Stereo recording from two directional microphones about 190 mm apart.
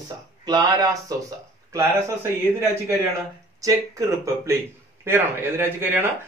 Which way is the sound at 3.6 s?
15° right (ahead or behind).